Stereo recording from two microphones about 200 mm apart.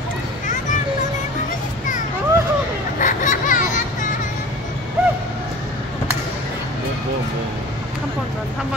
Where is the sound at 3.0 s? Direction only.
40° left (ahead or behind).